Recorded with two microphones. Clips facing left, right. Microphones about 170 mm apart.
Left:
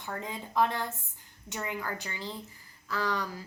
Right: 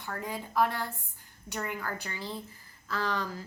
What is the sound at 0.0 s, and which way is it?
A woman's voice, 20° left (ahead or behind).